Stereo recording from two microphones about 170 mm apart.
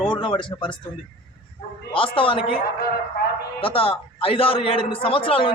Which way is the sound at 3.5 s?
35° left (ahead or behind).